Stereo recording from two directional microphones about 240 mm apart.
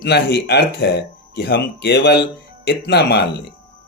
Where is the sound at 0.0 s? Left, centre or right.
Left.